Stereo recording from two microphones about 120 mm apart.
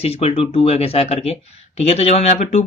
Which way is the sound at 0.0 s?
55° left (ahead or behind).